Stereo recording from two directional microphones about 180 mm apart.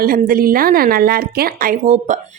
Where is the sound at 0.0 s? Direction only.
55° right (ahead or behind).